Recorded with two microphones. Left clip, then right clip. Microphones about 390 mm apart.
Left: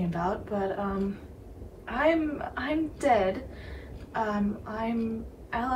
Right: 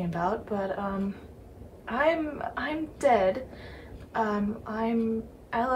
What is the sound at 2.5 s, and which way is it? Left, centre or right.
A woman's voice, centre.